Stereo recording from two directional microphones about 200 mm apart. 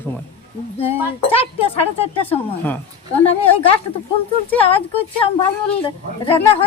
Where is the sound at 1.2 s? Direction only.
30° left (ahead or behind).